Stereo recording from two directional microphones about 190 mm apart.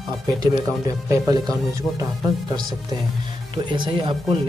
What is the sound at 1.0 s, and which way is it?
Speech, 20° right (ahead or behind).